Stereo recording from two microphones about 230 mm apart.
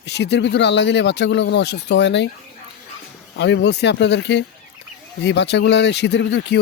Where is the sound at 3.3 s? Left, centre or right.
Left.